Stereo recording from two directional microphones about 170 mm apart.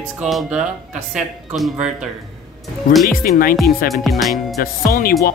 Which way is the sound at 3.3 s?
60° left (ahead or behind).